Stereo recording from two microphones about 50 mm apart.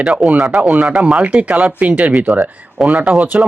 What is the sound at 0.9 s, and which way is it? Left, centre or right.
Speech, centre.